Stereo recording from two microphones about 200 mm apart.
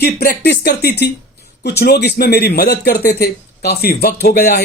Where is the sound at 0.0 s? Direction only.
50° left (ahead or behind).